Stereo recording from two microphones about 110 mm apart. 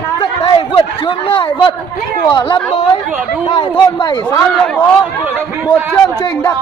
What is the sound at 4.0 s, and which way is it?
Speech, 40° left (ahead or behind).